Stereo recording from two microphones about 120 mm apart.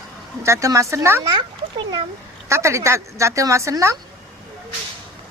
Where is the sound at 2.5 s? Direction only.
25° right (ahead or behind).